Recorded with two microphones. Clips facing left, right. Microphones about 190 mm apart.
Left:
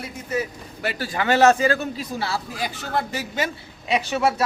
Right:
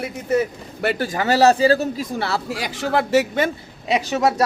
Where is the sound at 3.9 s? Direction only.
35° right (ahead or behind).